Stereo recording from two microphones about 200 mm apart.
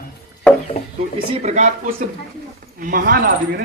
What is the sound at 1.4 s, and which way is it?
A man's voice, 40° right (ahead or behind).